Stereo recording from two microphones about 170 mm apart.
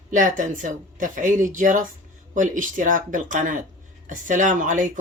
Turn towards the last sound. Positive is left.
turn(degrees=-50)  # may be behind; listen again after turning